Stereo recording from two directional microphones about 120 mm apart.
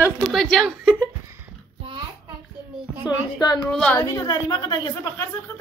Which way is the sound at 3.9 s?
30° left (ahead or behind).